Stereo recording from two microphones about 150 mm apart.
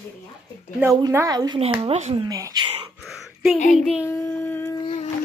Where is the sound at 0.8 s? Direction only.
20° right (ahead or behind).